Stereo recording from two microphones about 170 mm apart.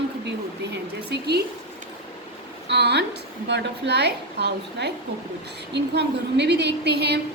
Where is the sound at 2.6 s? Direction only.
80° right.